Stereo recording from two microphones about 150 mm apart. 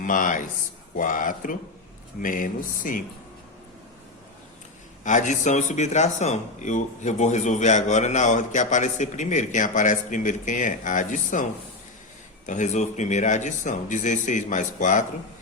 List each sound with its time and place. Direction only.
0.0 s a man's voice: 60° left (ahead or behind)
5.0 s speech: 55° left (ahead or behind)
12.5 s speech: 55° left (ahead or behind)